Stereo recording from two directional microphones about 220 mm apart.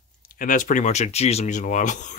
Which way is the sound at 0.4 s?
35° left (ahead or behind).